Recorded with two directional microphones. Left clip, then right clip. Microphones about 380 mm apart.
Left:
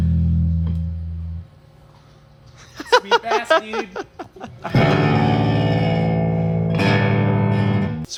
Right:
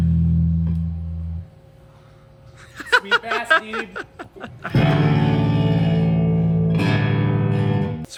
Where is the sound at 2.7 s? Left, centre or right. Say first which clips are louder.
Left 2 dB; centre; by 7.9 s left.